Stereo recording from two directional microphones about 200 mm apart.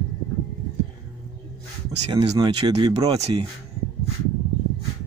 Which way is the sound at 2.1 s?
20° right (ahead or behind).